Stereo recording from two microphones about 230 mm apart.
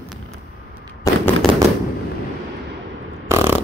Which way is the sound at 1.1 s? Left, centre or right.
Centre.